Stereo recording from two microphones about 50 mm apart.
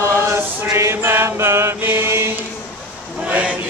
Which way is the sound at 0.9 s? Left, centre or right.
Right.